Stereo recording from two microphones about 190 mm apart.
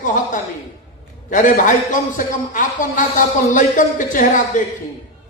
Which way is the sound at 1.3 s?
40° left (ahead or behind).